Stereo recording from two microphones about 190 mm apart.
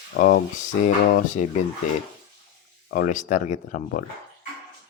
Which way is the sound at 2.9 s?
40° left (ahead or behind).